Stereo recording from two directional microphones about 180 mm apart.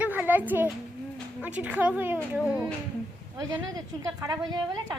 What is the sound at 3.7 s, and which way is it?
A woman's voice, 20° right (ahead or behind).